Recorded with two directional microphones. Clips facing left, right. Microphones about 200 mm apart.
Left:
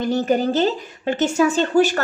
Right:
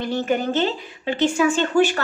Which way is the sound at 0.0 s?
40° left (ahead or behind).